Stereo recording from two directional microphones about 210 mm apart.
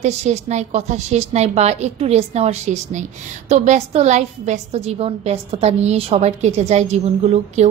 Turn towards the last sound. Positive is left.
turn(degrees=-30)  # may be behind; listen again after turning